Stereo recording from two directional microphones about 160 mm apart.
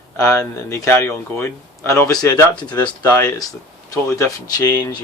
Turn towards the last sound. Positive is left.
turn(degrees=25)  # may be behind; listen again after turning